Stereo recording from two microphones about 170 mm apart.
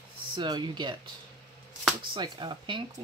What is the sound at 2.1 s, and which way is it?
Speech, 25° right (ahead or behind).